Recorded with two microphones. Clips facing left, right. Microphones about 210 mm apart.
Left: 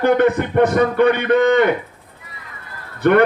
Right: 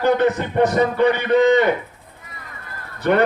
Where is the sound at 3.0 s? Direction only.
55° left (ahead or behind).